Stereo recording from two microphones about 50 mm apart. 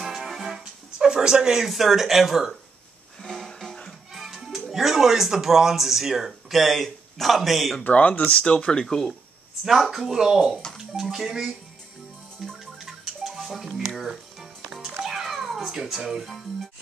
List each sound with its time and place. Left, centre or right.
0.0 s music: centre
0.9 s speech: centre
3.2 s music: centre
4.1 s speech: centre
7.8 s speech: left
8.8 s speech: centre
9.7 s speech: centre
12.4 s music: centre